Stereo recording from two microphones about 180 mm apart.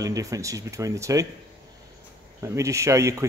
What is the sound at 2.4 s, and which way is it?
Speech, 15° right (ahead or behind).